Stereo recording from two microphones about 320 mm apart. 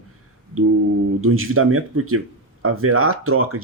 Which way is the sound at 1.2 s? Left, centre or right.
Right.